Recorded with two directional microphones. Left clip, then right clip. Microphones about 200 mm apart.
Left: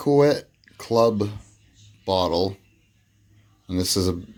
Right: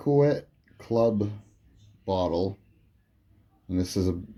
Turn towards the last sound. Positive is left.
turn(degrees=15)  # may be behind; listen again after turning